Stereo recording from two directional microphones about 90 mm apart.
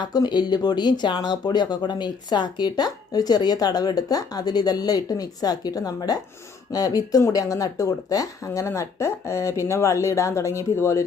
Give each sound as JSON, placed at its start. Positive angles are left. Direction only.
{"t": 0.0, "sound": "speech", "side_deg": 50}